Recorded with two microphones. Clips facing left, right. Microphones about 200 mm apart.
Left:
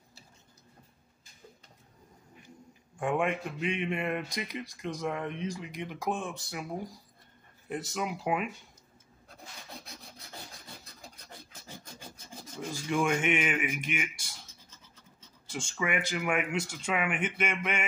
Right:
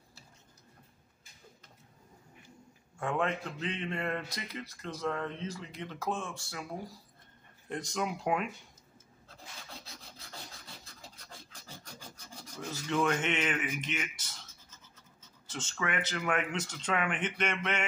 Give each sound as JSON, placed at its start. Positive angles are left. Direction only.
{"t": 3.0, "sound": "a man's voice", "side_deg": 15}
{"t": 7.7, "sound": "speech", "side_deg": 5}
{"t": 9.3, "sound": "filing", "side_deg": 15}
{"t": 11.0, "sound": "filing", "side_deg": 20}
{"t": 12.4, "sound": "a man's voice", "side_deg": 10}
{"t": 15.4, "sound": "a man's voice", "side_deg": 10}